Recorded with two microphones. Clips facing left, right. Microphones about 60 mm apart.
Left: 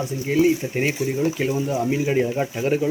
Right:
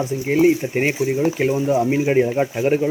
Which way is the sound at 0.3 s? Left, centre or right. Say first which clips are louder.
Right 3 dB; right.